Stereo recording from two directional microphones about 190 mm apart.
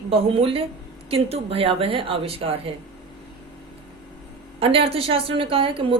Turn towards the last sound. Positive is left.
turn(degrees=-25)  # may be behind; listen again after turning